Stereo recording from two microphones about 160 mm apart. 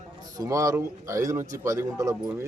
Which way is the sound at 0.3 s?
20° right (ahead or behind).